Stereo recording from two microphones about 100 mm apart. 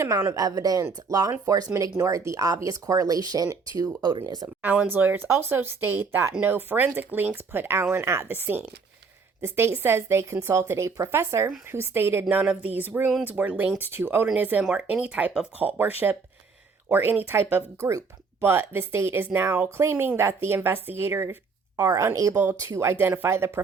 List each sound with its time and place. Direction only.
0.0 s speech: 30° right (ahead or behind); by 4.4 s 45° right (ahead or behind)
4.4 s speech: 15° right (ahead or behind)